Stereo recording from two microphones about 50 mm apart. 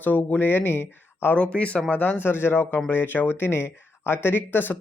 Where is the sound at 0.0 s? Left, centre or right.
Left.